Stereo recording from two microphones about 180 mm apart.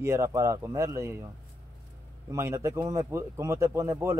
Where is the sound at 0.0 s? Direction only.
15° right (ahead or behind).